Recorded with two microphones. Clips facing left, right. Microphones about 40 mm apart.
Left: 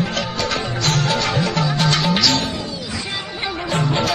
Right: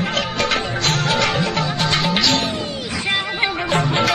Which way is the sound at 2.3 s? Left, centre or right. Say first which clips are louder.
Right 1 dB; right.